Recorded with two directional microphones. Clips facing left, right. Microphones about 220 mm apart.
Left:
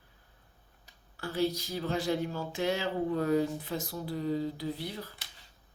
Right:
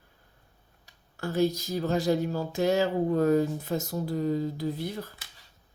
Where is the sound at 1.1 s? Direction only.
45° right (ahead or behind).